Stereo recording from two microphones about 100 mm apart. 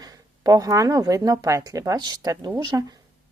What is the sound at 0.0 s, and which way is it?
Speech, 40° right (ahead or behind).